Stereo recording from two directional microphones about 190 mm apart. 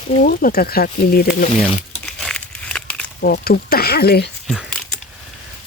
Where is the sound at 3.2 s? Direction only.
55° left (ahead or behind).